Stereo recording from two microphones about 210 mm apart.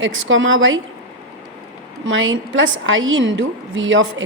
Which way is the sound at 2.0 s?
65° right (ahead or behind).